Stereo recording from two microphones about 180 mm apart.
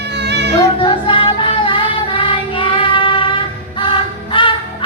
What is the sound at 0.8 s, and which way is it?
Music, 30° left (ahead or behind).